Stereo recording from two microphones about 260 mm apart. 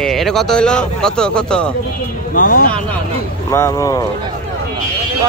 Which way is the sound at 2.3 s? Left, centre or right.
Left.